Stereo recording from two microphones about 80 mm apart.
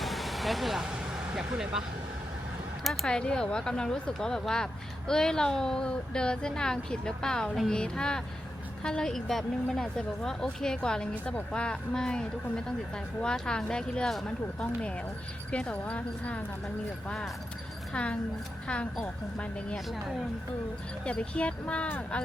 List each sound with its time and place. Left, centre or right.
0.0 s vehicle: centre
1.4 s speech: centre
2.8 s speech: centre
3.1 s speech: centre
15.5 s speech: centre
17.9 s speech: centre
21.0 s speech: centre